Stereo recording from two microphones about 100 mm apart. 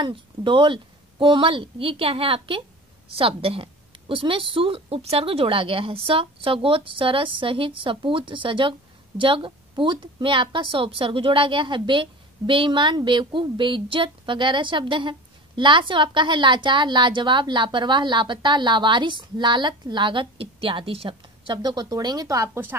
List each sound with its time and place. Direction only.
0.0 s a woman's voice: 55° right (ahead or behind); by 21.5 s 70° right (ahead or behind)
21.6 s speech: 40° right (ahead or behind)